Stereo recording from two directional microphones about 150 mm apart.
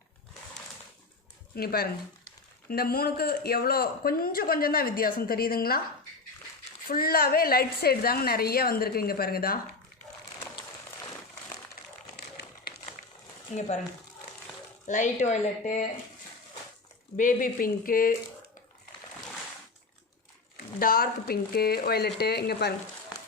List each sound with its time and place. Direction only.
1.5 s speech: 90° left
6.8 s speech: 80° left
13.5 s speech: 50° left (ahead or behind)
14.8 s speech: 55° left (ahead or behind)
17.2 s speech: 60° left (ahead or behind)
20.7 s speech: 75° left (ahead or behind); by 22.7 s 90° left